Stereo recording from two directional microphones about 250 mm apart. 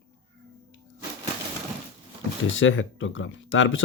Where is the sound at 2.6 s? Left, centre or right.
Left.